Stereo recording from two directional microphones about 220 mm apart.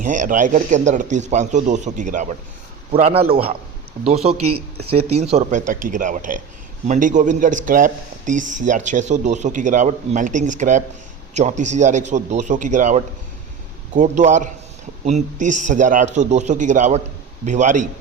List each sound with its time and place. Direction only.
0.0 s a man's voice: 35° right (ahead or behind)
4.4 s speech: 90° right
5.1 s speech: 30° right (ahead or behind)